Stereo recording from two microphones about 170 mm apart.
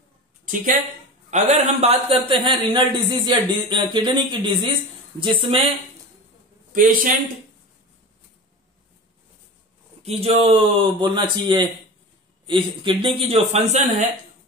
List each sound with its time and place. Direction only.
1.3 s speech: 40° right (ahead or behind)
6.7 s a man's voice: 55° right (ahead or behind)
10.0 s a man's voice: 35° right (ahead or behind)